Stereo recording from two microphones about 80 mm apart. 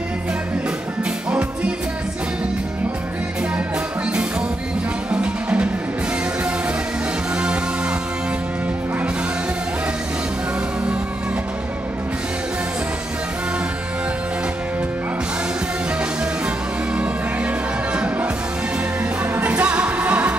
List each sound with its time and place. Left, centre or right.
5.1 s music: centre
17.9 s music: centre
19.3 s music: centre